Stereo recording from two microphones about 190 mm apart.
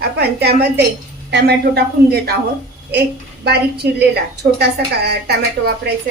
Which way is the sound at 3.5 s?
60° right (ahead or behind).